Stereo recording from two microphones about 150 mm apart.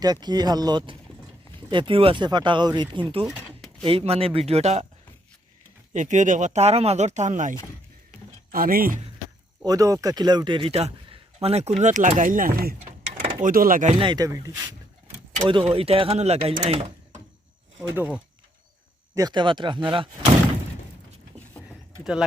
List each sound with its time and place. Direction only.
0.0 s speech: 25° right (ahead or behind)
3.2 s a sound: centre (ahead or behind)
3.8 s speech: 40° right (ahead or behind)
5.9 s speech: 55° right (ahead or behind)
8.5 s speech: 75° right (ahead or behind)
9.6 s a man's voice: 20° right (ahead or behind); by 11.7 s 45° right (ahead or behind)
11.8 s speech: 55° right (ahead or behind)
13.9 s speech: 35° right (ahead or behind)
15.4 s speech: 35° right (ahead or behind)
17.9 s speech: 10° right (ahead or behind)
19.1 s speech: 25° right (ahead or behind)